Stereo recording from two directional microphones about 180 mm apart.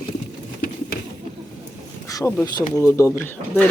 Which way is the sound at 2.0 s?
15° left (ahead or behind).